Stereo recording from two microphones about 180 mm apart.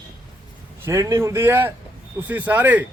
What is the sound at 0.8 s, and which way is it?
A man's voice, 15° right (ahead or behind).